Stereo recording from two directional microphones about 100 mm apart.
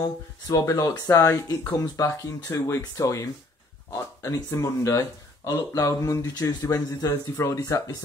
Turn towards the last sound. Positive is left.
turn(degrees=30)  # may be behind; listen again after turning